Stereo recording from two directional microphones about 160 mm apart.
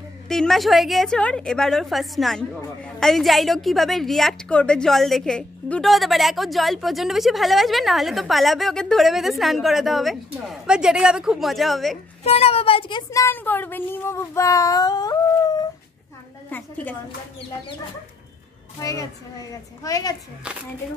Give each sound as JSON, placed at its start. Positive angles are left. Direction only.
{"t": 0.3, "sound": "a woman's voice", "side_deg": 0}
{"t": 12.2, "sound": "a child's voice", "side_deg": 40}
{"t": 13.1, "sound": "speech", "side_deg": 15}
{"t": 16.4, "sound": "a sound", "side_deg": 10}
{"t": 18.8, "sound": "speech", "side_deg": 20}